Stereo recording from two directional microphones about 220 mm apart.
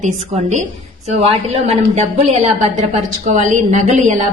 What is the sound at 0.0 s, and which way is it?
A woman's voice, 30° right (ahead or behind).